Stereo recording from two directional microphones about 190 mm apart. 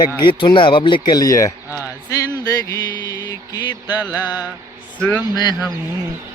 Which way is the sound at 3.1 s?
20° left (ahead or behind).